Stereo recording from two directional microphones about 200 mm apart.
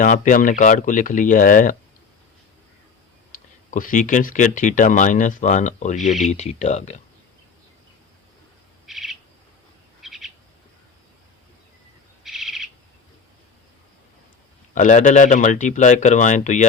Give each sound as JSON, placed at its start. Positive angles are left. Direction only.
{"t": 0.0, "sound": "speech", "side_deg": 40}
{"t": 3.7, "sound": "speech", "side_deg": 40}
{"t": 8.9, "sound": "owl", "side_deg": 0}
{"t": 12.2, "sound": "owl", "side_deg": 0}
{"t": 14.8, "sound": "speech", "side_deg": 35}